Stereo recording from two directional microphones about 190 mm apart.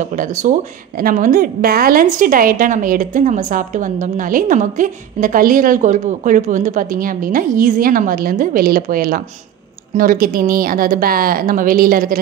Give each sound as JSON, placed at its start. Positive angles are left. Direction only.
{"t": 0.0, "sound": "a woman's voice", "side_deg": -45}